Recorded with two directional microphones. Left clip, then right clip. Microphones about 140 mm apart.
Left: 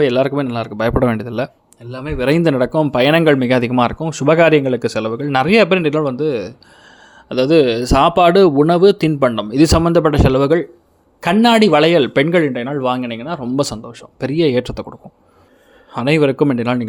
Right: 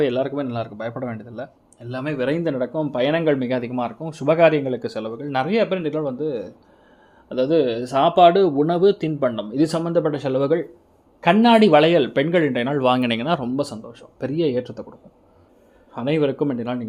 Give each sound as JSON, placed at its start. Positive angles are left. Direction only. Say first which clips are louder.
{"t": 0.2, "sound": "speech", "louder": "left 7 dB", "side_deg": 45}
{"t": 0.8, "sound": "speech", "louder": "left 13 dB", "side_deg": 90}
{"t": 1.9, "sound": "speech", "louder": "left 1 dB", "side_deg": 5}
{"t": 2.2, "sound": "speech", "louder": "left 9 dB", "side_deg": 65}
{"t": 4.0, "sound": "speech", "louder": "left 2 dB", "side_deg": 45}
{"t": 11.2, "sound": "a man's voice", "louder": "left 2 dB", "side_deg": 30}
{"t": 12.0, "sound": "a man's voice", "louder": "left 5 dB", "side_deg": 35}
{"t": 12.5, "sound": "speech", "louder": "even", "side_deg": 5}
{"t": 13.0, "sound": "speech", "louder": "right 2 dB", "side_deg": -15}
{"t": 13.6, "sound": "speech", "louder": "left 7 dB", "side_deg": 35}